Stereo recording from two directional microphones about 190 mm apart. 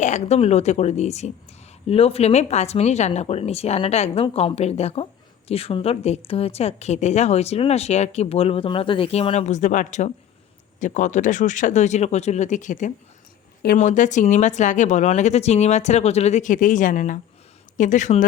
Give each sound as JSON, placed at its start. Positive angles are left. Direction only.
{"t": 0.0, "sound": "a woman's voice", "side_deg": 35}